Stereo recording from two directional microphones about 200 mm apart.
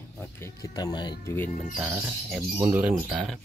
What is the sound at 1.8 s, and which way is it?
Speech, 10° right (ahead or behind).